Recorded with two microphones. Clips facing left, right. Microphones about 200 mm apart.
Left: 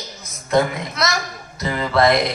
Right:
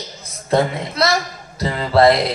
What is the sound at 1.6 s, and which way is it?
Music, 30° right (ahead or behind).